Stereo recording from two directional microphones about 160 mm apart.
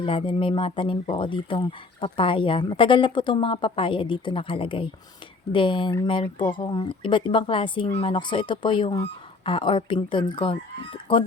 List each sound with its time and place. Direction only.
0.0 s speech: 35° left (ahead or behind)